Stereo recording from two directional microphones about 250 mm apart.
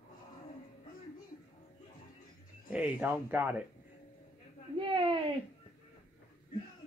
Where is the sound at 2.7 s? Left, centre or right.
Centre.